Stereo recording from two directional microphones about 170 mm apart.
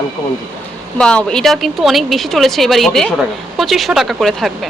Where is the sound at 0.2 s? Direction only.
20° left (ahead or behind).